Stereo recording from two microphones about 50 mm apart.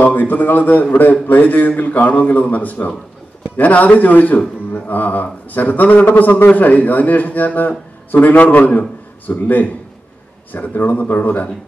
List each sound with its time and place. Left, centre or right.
0.0 s a man's voice: left